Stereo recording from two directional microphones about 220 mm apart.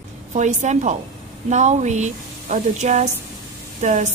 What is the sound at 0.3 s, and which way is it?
A woman's voice, 35° right (ahead or behind).